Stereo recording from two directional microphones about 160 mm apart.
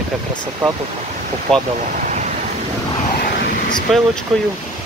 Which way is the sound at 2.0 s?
50° right (ahead or behind).